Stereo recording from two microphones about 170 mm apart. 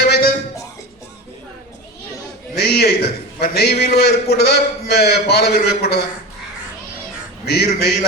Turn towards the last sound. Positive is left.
turn(degrees=70)  # may be behind; listen again after turning